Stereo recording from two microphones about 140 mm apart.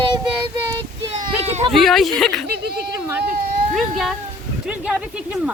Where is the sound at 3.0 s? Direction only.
10° right (ahead or behind).